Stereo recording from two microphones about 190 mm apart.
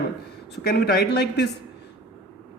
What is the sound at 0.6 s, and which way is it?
Speech, 55° left (ahead or behind).